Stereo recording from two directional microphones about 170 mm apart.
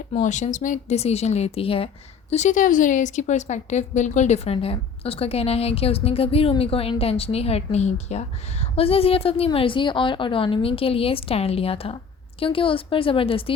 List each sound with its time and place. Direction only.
0.1 s a woman's voice: 45° left (ahead or behind)
2.3 s a woman's voice: 45° left (ahead or behind)